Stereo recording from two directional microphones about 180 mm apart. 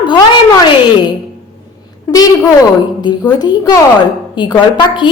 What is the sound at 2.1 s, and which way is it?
A woman's voice, 20° left (ahead or behind).